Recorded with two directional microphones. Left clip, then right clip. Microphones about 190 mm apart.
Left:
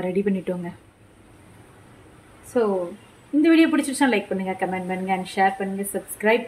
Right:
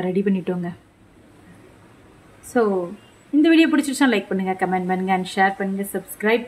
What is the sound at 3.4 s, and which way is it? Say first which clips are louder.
Speech: right 2 dB; 25° right (ahead or behind).